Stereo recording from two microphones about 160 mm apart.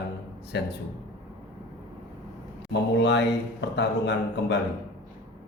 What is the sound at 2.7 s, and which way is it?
Speech, 90° left.